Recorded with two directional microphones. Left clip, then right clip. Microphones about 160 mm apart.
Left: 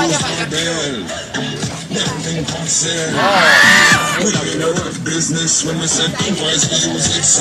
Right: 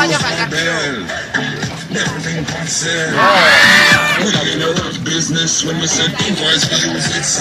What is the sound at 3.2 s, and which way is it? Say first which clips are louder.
Speech: right 1 dB; 50° right (ahead or behind).